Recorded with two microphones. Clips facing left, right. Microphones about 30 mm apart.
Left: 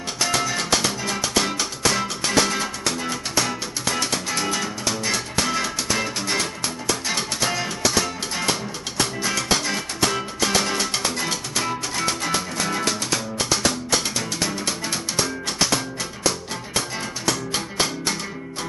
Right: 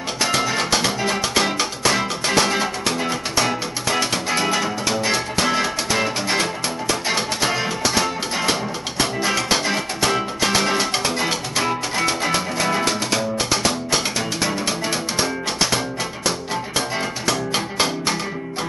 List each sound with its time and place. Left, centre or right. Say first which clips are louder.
0.2 s music: right 3 dB; right
17.3 s music: right 2 dB; centre